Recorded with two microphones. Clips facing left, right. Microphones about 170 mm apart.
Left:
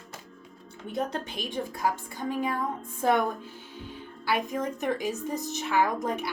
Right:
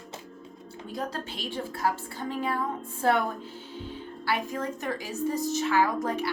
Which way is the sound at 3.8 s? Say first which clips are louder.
Right 2 dB; 15° left (ahead or behind).